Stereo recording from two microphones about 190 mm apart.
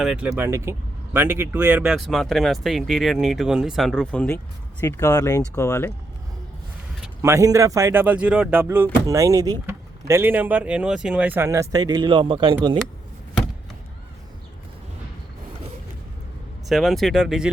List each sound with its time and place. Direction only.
0.0 s speech: centre (ahead or behind); by 5.9 s 15° left (ahead or behind)
7.2 s speech: 15° right (ahead or behind)
16.6 s speech: centre (ahead or behind)